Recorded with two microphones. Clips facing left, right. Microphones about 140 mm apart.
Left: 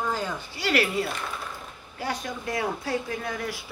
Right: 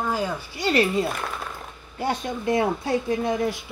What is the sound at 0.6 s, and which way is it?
Speech, 25° right (ahead or behind).